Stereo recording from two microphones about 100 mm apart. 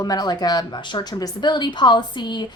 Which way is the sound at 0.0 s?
40° left (ahead or behind).